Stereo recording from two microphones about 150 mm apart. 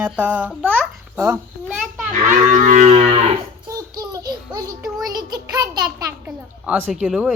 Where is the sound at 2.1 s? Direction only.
60° right (ahead or behind); by 3.2 s 40° right (ahead or behind).